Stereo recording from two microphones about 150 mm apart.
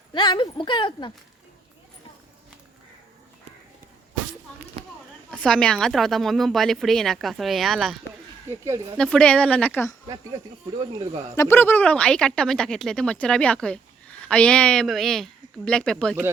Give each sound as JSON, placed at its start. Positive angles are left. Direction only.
{"t": 0.1, "sound": "speech", "side_deg": 30}
{"t": 5.3, "sound": "a woman's voice", "side_deg": 5}
{"t": 8.4, "sound": "speech", "side_deg": -20}
{"t": 9.0, "sound": "speech", "side_deg": 5}
{"t": 11.3, "sound": "a woman's voice", "side_deg": 15}